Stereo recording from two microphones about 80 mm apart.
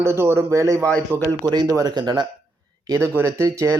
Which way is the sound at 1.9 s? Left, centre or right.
Right.